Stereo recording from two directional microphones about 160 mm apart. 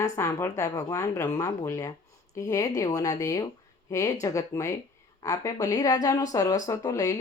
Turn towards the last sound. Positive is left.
turn(degrees=20)  # may be behind; listen again after turning